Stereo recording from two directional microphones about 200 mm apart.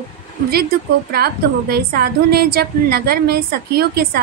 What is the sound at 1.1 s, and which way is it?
A woman's voice, 50° right (ahead or behind).